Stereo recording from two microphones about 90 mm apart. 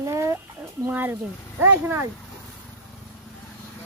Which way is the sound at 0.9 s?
20° right (ahead or behind).